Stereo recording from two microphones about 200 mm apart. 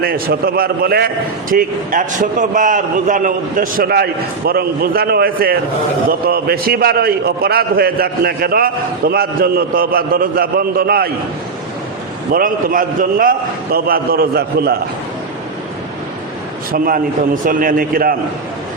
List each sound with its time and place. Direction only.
0.0 s a man's voice: 50° right (ahead or behind)
12.3 s a man's voice: 45° right (ahead or behind)
16.7 s a man's voice: 45° right (ahead or behind)